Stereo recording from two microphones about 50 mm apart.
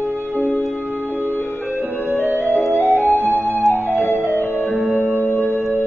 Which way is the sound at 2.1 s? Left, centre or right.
Right.